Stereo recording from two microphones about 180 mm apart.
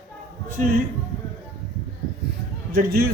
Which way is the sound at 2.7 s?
55° right (ahead or behind).